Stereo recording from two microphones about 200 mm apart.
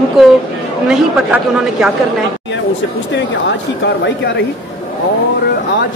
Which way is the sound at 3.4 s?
60° left (ahead or behind).